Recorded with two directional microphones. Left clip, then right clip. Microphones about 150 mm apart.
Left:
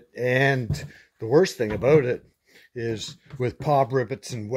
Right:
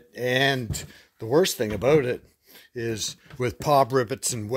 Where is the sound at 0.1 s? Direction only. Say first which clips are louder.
Left 1 dB; 10° right (ahead or behind).